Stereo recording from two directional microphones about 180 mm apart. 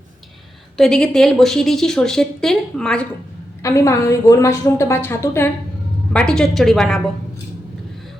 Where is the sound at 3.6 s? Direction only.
15° left (ahead or behind).